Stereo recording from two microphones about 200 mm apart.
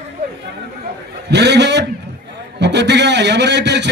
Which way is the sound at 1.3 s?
60° right (ahead or behind).